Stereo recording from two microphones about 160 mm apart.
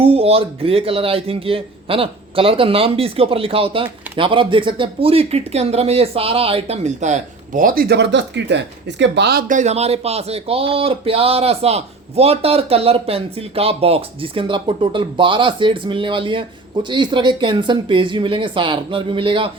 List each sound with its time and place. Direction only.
0.0 s speech: 35° right (ahead or behind)